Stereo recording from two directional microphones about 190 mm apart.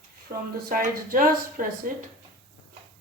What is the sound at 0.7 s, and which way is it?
A woman's voice, 45° right (ahead or behind).